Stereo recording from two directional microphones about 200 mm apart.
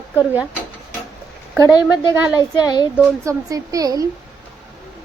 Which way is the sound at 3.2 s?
15° right (ahead or behind).